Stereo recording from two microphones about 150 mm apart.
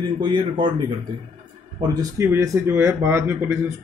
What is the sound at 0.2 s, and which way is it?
Speech, 35° right (ahead or behind).